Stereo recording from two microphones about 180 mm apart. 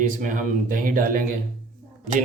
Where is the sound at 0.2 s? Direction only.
45° right (ahead or behind).